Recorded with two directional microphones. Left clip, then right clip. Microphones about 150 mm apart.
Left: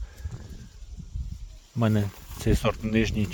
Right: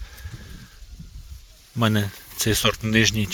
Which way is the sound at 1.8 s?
Centre (ahead or behind).